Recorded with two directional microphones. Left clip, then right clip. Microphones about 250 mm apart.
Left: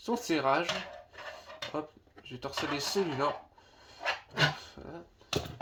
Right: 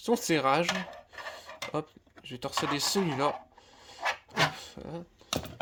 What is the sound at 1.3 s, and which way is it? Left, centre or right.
Filing, right.